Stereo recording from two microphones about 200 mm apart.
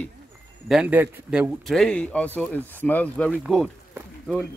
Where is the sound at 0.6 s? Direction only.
5° right (ahead or behind).